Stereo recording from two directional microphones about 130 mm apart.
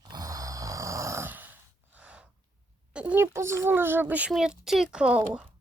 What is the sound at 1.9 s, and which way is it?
Gasp, 10° right (ahead or behind).